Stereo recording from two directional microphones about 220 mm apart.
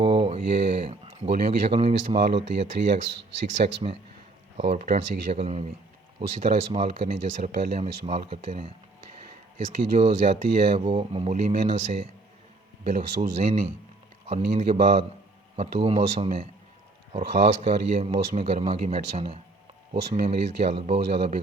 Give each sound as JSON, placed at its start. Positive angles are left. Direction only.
{"t": 0.0, "sound": "a sound", "side_deg": -20}
{"t": 2.1, "sound": "speech", "side_deg": -50}
{"t": 3.6, "sound": "speech", "side_deg": -35}